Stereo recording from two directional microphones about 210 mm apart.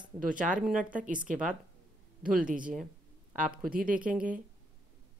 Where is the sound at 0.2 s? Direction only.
40° right (ahead or behind).